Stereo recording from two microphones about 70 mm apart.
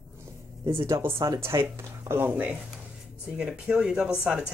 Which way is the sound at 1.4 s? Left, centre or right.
Right.